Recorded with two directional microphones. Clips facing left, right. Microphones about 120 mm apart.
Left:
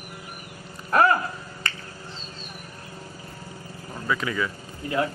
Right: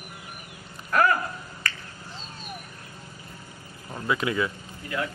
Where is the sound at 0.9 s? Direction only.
30° left (ahead or behind).